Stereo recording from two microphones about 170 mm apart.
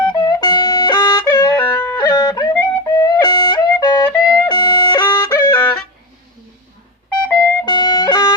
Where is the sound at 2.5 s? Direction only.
10° left (ahead or behind).